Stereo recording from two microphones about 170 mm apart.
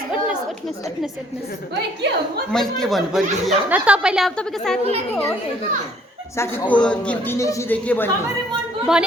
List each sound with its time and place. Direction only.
2.0 s a woman's voice: 80° right
2.5 s speech: 5° left (ahead or behind)
6.3 s a man's voice: 15° left (ahead or behind)
8.9 s speech: 5° right (ahead or behind)